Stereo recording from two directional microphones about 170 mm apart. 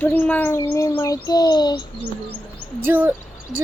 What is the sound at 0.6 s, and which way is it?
Bird, 15° left (ahead or behind).